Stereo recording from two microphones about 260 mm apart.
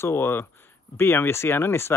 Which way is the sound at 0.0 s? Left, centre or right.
Centre.